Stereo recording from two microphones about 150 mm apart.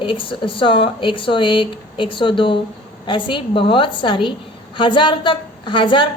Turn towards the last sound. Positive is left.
turn(degrees=35)  # may be behind; listen again after turning